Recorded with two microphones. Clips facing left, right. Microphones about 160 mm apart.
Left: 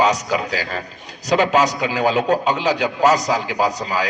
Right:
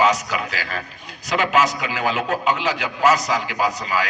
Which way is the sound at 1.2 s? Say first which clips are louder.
Left 3 dB; 40° left (ahead or behind).